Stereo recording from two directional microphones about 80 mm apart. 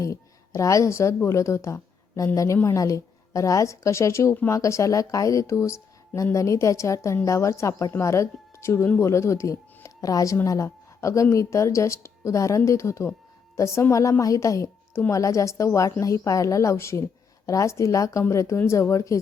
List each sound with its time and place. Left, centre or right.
0.0 s a woman's voice: left